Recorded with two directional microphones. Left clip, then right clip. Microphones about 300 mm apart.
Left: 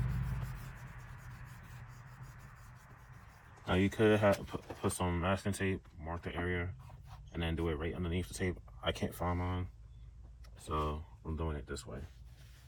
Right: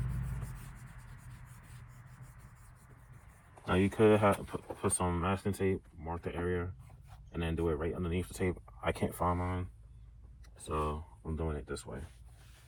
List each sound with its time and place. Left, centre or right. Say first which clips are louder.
3.7 s speech: right 3 dB; centre
10.7 s speech: right 2 dB; centre